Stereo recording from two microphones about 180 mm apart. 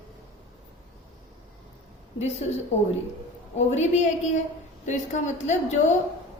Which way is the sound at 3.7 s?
40° left (ahead or behind).